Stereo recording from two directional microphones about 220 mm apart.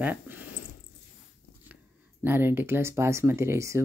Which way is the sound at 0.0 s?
10° right (ahead or behind).